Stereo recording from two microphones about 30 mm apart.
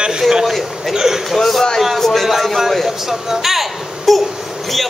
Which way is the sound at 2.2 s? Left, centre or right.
Centre.